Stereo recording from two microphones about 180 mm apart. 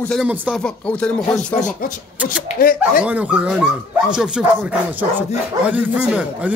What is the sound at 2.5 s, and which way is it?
Speech, 55° left (ahead or behind).